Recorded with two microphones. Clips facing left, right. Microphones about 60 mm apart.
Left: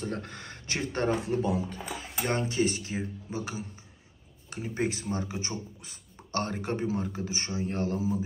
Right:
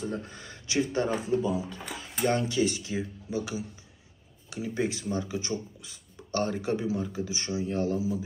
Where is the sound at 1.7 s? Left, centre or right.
Left.